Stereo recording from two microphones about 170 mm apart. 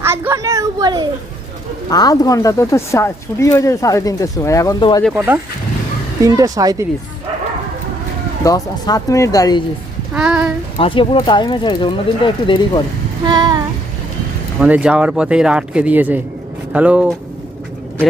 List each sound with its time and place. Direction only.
0.0 s a child's voice: 15° right (ahead or behind)
1.9 s speech: 20° left (ahead or behind)
5.1 s speech: 10° right (ahead or behind)
8.4 s speech: 20° left (ahead or behind)
10.2 s speech: 5° right (ahead or behind)
10.8 s speech: 30° left (ahead or behind)
13.2 s speech: 25° right (ahead or behind)
14.6 s speech: 5° right (ahead or behind)